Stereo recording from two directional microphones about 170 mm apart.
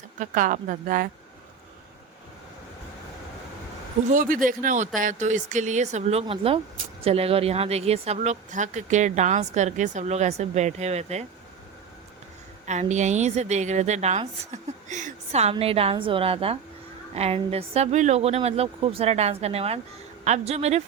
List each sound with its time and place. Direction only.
0.2 s speech: 50° right (ahead or behind)
4.1 s a woman's voice: 50° right (ahead or behind)
12.6 s a woman's voice: 45° right (ahead or behind)